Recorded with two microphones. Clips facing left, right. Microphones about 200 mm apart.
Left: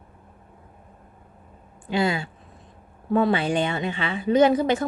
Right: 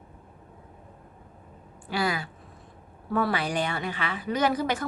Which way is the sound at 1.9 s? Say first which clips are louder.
Left 5 dB; 25° left (ahead or behind).